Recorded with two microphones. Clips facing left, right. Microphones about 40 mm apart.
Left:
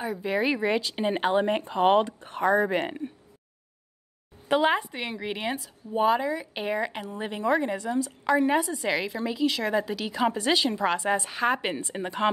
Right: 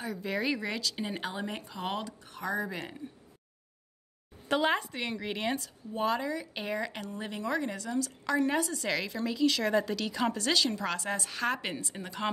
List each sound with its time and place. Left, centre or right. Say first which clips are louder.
0.0 s speech: left 6 dB; centre; by 3.0 s left
4.5 s a woman's voice: left 5 dB; centre